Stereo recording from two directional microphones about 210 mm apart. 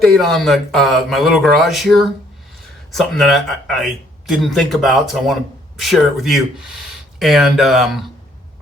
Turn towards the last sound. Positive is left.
turn(degrees=0)  # may be behind; listen again after turning